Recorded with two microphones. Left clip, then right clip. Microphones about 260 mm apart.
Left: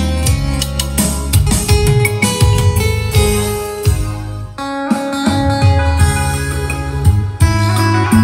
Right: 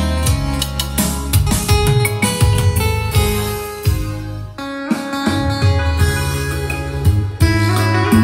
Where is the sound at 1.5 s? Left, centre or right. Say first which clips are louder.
Left 1 dB; centre.